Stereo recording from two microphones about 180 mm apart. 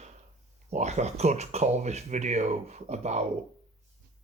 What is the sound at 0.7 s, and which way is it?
Speech, 40° right (ahead or behind).